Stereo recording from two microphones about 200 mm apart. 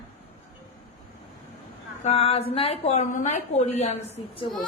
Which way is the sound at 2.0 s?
30° left (ahead or behind).